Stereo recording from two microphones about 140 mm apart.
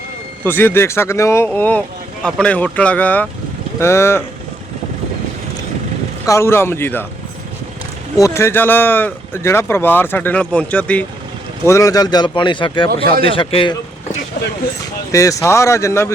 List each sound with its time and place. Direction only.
0.4 s speech: 15° left (ahead or behind)
6.2 s speech: 20° left (ahead or behind)
8.1 s speech: 20° left (ahead or behind)
11.6 s speech: 20° left (ahead or behind); by 13.7 s 35° left (ahead or behind)
15.1 s speech: 25° left (ahead or behind)